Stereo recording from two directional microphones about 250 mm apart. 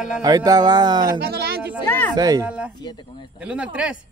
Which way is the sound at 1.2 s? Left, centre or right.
Right.